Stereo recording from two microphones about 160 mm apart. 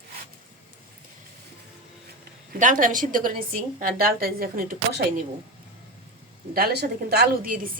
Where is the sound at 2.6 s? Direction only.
55° right (ahead or behind).